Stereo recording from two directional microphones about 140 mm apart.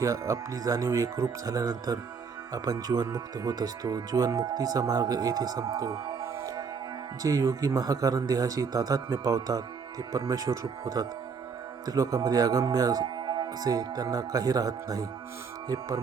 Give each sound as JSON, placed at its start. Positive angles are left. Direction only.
{"t": 0.0, "sound": "speech", "side_deg": -20}